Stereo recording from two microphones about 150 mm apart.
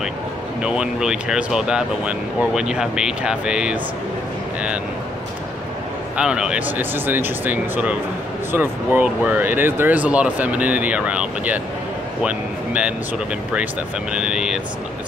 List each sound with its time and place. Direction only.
0.6 s speech: 5° right (ahead or behind)
6.1 s speech: 5° right (ahead or behind)
14.1 s speech: 5° right (ahead or behind)